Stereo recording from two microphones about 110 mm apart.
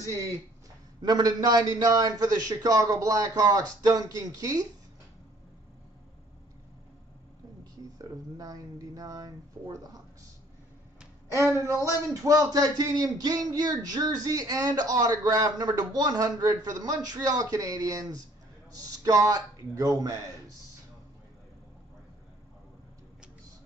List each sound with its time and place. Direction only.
0.1 s speech: 25° right (ahead or behind)
8.0 s speech: 30° right (ahead or behind)
11.6 s a man's voice: 30° right (ahead or behind)